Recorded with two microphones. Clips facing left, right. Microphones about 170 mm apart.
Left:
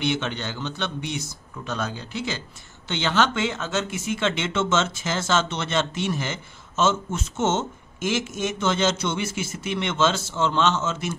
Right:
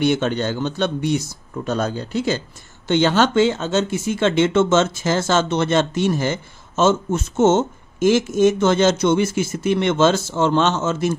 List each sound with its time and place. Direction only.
0.0 s speech: 45° right (ahead or behind)